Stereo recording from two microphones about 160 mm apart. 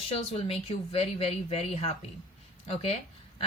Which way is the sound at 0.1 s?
40° left (ahead or behind).